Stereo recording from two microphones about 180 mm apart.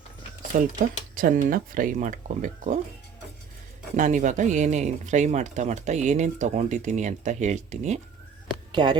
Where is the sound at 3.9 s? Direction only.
45° right (ahead or behind).